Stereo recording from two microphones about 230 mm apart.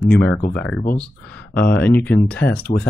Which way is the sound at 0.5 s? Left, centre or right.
Centre.